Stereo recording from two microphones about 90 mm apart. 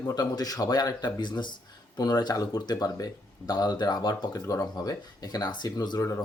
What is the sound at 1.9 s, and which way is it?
Speech, 45° left (ahead or behind).